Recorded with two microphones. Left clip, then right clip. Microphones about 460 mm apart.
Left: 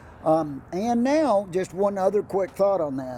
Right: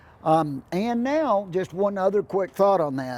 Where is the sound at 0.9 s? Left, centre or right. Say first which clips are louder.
Left 2 dB; right.